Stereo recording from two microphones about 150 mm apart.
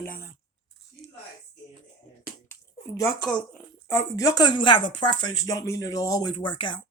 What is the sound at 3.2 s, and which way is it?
Speech, 5° left (ahead or behind).